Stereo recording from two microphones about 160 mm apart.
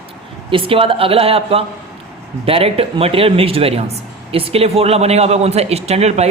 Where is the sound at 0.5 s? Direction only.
35° right (ahead or behind).